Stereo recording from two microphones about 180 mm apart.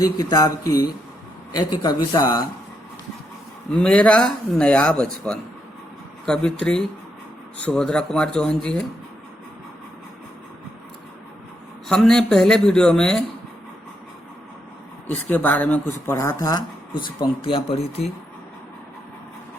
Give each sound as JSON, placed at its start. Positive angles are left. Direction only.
{"t": 0.0, "sound": "speech", "side_deg": 20}
{"t": 3.7, "sound": "speech", "side_deg": 5}
{"t": 11.9, "sound": "speech", "side_deg": 5}
{"t": 15.3, "sound": "speech", "side_deg": 10}